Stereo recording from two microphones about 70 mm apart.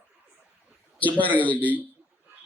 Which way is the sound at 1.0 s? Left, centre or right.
Left.